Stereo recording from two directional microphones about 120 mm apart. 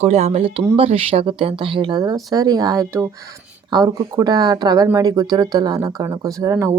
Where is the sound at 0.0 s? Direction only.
65° right (ahead or behind).